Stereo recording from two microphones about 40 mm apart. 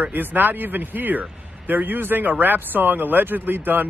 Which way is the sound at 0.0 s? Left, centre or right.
Right.